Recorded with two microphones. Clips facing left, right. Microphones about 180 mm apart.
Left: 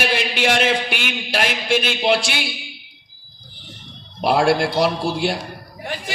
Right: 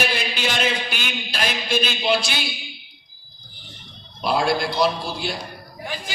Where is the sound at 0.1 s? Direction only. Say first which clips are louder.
Left 6 dB; 75° left (ahead or behind).